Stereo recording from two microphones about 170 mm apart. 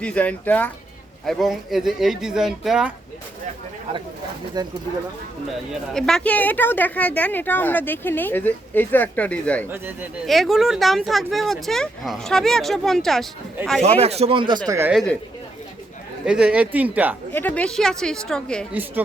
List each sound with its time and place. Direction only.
0.0 s speech: 10° left (ahead or behind)
4.6 s speech: 25° right (ahead or behind)
5.9 s speech: 5° left (ahead or behind)
9.6 s speech: 10° right (ahead or behind)
10.2 s speech: centre (ahead or behind)
13.8 s speech: 40° right (ahead or behind)
14.7 s speech: 15° right (ahead or behind)
16.2 s speech: 5° right (ahead or behind)
17.3 s speech: 10° left (ahead or behind)
18.7 s speech: 10° right (ahead or behind)